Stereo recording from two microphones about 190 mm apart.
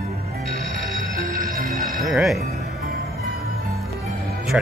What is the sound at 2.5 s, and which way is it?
Music, 55° right (ahead or behind).